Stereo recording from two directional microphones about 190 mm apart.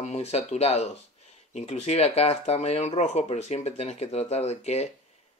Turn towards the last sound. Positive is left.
turn(degrees=35)  # may be behind; listen again after turning